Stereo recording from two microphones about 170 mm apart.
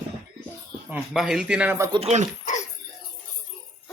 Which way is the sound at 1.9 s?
40° right (ahead or behind).